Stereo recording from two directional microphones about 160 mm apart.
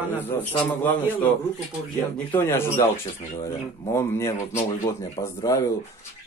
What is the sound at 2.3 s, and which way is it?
Speech, 15° left (ahead or behind).